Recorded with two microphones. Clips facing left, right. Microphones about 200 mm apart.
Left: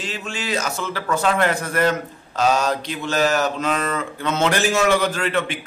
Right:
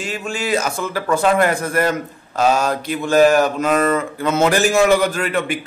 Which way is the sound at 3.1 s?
50° right (ahead or behind).